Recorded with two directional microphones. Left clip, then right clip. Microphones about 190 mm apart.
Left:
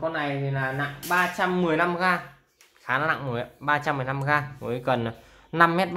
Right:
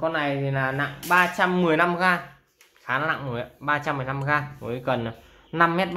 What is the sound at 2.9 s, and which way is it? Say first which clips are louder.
Speech: even; 10° left (ahead or behind).